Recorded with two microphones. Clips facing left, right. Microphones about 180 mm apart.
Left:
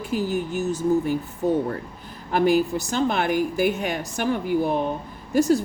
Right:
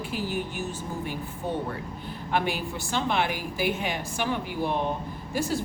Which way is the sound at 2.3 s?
40° left (ahead or behind).